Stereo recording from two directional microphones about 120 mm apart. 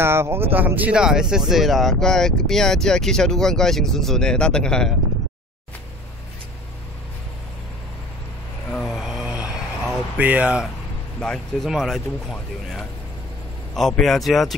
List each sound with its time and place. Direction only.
0.0 s speech: 20° right (ahead or behind); by 4.9 s 5° left (ahead or behind)
8.7 s a sound: centre (ahead or behind)
11.1 s speech: 5° left (ahead or behind)